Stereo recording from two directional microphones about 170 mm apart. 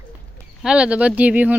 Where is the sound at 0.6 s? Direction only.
5° right (ahead or behind).